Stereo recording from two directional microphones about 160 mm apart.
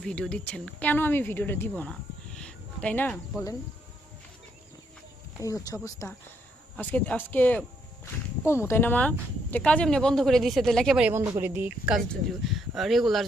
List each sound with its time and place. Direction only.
0.0 s speech: 5° left (ahead or behind)
5.5 s speech: 20° left (ahead or behind); by 11.1 s centre (ahead or behind)
11.1 s speech: 15° right (ahead or behind)
11.9 s speech: centre (ahead or behind)